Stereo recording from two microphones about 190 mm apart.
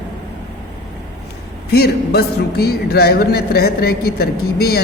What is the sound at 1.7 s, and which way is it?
Speech, 55° left (ahead or behind).